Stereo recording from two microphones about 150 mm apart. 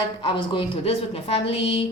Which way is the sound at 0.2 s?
35° left (ahead or behind).